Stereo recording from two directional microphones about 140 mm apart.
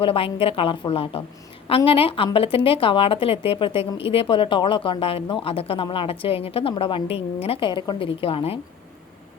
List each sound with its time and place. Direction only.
0.0 s a woman's voice: 40° left (ahead or behind)